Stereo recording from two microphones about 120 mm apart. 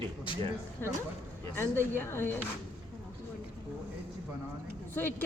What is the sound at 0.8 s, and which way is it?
Speech, 20° left (ahead or behind).